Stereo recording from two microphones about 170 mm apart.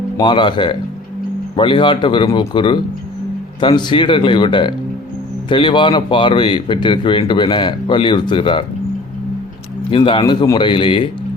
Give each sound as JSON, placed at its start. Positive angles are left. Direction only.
{"t": 0.2, "sound": "a man's voice", "side_deg": 30}
{"t": 9.9, "sound": "a man's voice", "side_deg": 30}